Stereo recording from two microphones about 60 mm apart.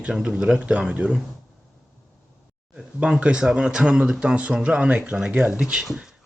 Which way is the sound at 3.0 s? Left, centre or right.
Centre.